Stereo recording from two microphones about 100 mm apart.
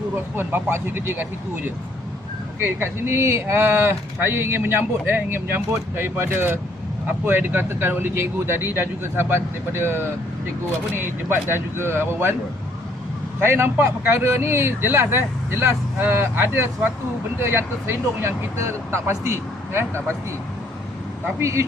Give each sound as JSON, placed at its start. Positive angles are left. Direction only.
{"t": 0.3, "sound": "speech", "side_deg": -20}
{"t": 2.6, "sound": "speech", "side_deg": -20}
{"t": 13.4, "sound": "speech", "side_deg": -25}
{"t": 21.4, "sound": "speech", "side_deg": -30}